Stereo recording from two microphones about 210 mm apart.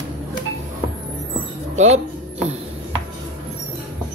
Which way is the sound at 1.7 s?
30° right (ahead or behind).